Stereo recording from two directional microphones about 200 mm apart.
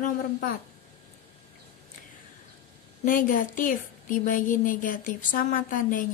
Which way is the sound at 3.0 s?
40° left (ahead or behind).